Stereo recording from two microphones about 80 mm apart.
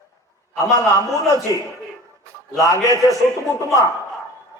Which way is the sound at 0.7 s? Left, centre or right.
Left.